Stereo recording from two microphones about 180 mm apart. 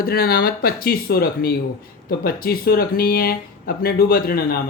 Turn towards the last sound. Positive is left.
turn(degrees=55)  # may be behind; listen again after turning